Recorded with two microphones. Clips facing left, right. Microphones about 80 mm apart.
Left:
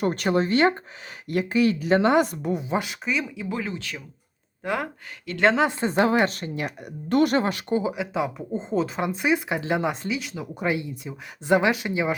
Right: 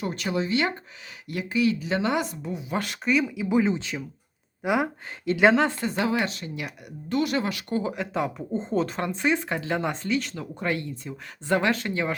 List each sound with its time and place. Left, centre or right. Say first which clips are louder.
0.0 s speech: left 5 dB; left
2.7 s speech: right 1 dB; centre
3.5 s speech: right 9 dB; right
5.3 s speech: right 7 dB; right
6.0 s speech: left 6 dB; left
7.7 s speech: left 3 dB; centre